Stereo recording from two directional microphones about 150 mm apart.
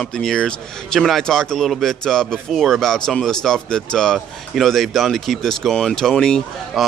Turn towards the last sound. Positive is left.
turn(degrees=5)  # may be behind; listen again after turning